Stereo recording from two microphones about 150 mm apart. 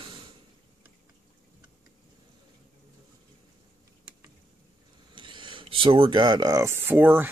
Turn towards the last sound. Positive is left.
turn(degrees=-15)  # may be behind; listen again after turning